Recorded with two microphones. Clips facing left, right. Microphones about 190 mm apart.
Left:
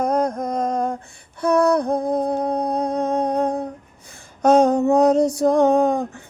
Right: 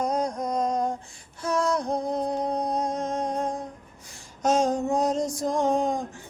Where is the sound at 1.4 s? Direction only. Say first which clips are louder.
Left 8 dB; 60° left (ahead or behind).